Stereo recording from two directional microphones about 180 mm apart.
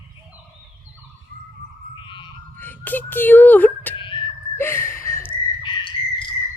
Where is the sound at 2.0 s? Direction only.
25° left (ahead or behind).